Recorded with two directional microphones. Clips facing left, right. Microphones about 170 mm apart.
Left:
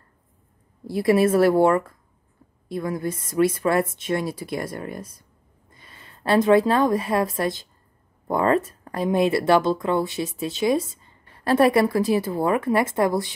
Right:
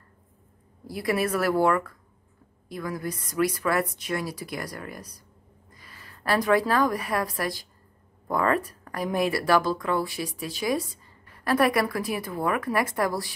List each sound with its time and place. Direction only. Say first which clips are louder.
0.8 s a woman's voice: left 8 dB; 25° left (ahead or behind)